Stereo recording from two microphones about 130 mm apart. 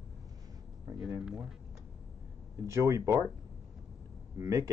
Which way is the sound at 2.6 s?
20° right (ahead or behind).